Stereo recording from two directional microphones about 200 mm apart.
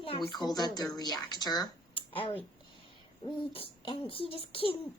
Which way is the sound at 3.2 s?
25° left (ahead or behind).